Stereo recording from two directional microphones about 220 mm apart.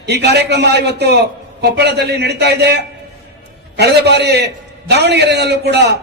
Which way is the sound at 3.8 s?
50° right (ahead or behind).